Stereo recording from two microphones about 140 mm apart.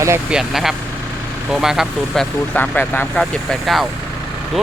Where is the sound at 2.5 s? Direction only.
10° left (ahead or behind).